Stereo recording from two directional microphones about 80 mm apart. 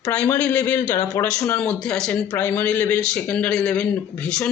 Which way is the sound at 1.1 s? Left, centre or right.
Left.